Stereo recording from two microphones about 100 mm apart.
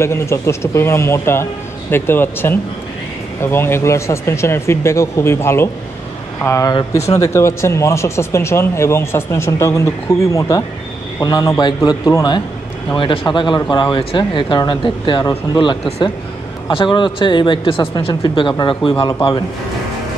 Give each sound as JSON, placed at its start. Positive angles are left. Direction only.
{"t": 0.0, "sound": "speech", "side_deg": 30}
{"t": 11.2, "sound": "speech", "side_deg": 45}
{"t": 12.9, "sound": "speech", "side_deg": 55}